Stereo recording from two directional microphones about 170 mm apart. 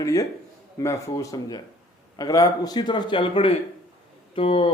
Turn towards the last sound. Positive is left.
turn(degrees=35)  # may be behind; listen again after turning